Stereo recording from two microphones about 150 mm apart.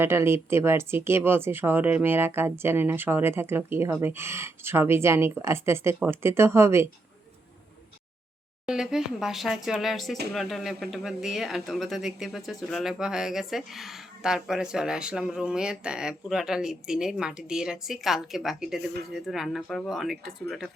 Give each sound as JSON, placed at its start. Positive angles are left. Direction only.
{"t": 0.0, "sound": "speech", "side_deg": -15}
{"t": 8.6, "sound": "speech", "side_deg": -5}